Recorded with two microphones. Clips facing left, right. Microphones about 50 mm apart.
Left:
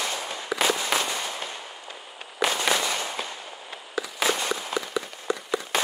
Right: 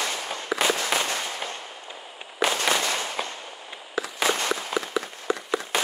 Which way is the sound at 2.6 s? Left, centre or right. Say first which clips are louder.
Even; centre.